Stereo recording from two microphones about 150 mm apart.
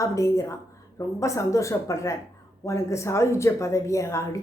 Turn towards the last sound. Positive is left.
turn(degrees=20)  # may be behind; listen again after turning